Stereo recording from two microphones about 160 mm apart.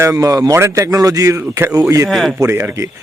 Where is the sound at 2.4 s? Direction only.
15° right (ahead or behind).